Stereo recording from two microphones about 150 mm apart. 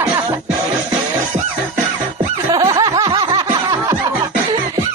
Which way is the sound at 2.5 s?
25° right (ahead or behind).